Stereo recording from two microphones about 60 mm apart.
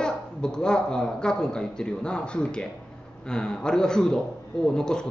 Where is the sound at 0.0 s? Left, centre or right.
Centre.